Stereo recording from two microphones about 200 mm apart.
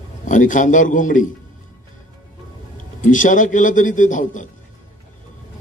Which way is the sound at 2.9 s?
40° left (ahead or behind).